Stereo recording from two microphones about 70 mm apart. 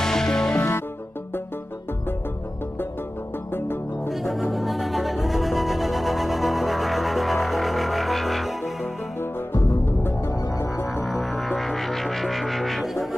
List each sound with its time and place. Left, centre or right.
0.0 s music: centre
3.5 s music: left
4.1 s music: centre
9.8 s music: left
11.1 s music: centre